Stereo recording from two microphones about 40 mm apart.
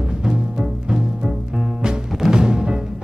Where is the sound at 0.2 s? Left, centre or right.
Centre.